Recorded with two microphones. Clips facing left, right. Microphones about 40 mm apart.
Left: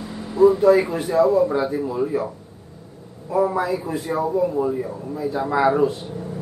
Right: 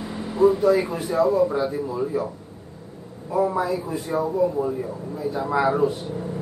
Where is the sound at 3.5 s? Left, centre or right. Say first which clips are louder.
Left 1 dB; left.